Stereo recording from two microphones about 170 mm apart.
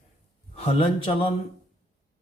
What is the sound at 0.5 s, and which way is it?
Speech, 35° left (ahead or behind).